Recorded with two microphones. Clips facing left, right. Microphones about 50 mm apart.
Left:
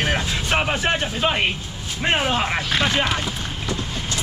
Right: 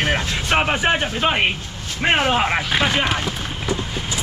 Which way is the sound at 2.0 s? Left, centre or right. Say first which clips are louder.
Right 3 dB; centre.